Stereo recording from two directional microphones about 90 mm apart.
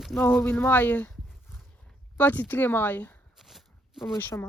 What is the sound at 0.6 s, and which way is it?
Speech, 20° left (ahead or behind).